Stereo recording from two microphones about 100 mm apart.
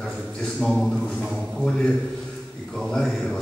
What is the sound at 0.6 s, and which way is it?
Speech, 5° left (ahead or behind).